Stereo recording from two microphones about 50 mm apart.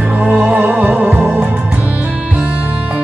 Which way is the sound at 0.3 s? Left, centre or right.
Right.